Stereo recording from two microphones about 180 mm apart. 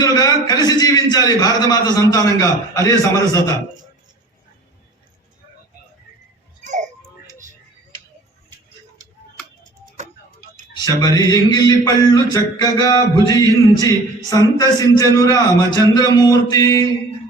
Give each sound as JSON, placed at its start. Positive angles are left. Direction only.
{"t": 0.0, "sound": "speech", "side_deg": 20}
{"t": 6.7, "sound": "a sound", "side_deg": -40}
{"t": 10.8, "sound": "speech", "side_deg": 20}